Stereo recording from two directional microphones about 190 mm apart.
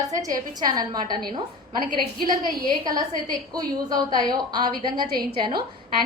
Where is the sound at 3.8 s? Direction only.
20° right (ahead or behind).